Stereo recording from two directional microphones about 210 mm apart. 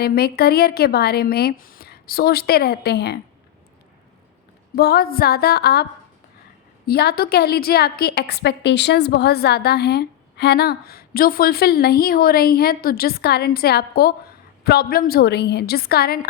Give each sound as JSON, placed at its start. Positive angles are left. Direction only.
{"t": 0.0, "sound": "a woman's voice", "side_deg": 45}
{"t": 4.7, "sound": "a woman's voice", "side_deg": 50}
{"t": 6.8, "sound": "a woman's voice", "side_deg": 50}